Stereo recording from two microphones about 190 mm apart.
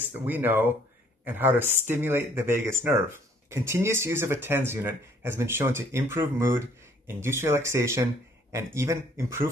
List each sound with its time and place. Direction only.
0.0 s speech: 10° right (ahead or behind)